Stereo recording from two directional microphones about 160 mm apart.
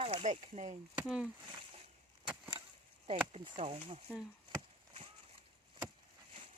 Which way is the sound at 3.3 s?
35° right (ahead or behind).